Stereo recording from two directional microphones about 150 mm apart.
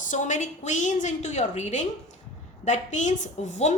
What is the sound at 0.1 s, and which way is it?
A woman's voice, 55° left (ahead or behind).